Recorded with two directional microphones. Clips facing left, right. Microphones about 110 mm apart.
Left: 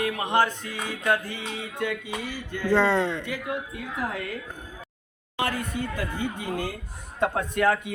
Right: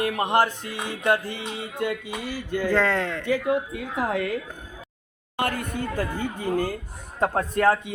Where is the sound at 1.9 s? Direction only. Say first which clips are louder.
Right 2 dB; 10° right (ahead or behind).